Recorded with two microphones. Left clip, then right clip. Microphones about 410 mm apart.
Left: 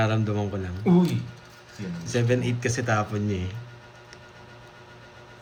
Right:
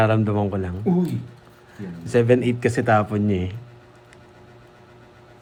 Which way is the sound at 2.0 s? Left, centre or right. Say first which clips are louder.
Right 8 dB; centre.